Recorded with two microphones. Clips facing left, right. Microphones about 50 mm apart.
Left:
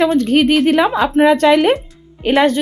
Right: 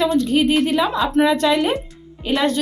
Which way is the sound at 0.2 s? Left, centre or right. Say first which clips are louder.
Left 4 dB; left.